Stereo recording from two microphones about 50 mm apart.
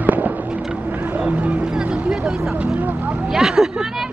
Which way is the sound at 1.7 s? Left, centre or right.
Centre.